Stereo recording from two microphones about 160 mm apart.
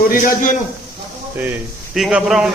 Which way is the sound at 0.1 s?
60° left (ahead or behind).